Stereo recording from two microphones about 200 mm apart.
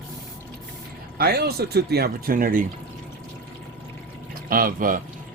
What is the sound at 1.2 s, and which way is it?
Speech, 50° right (ahead or behind).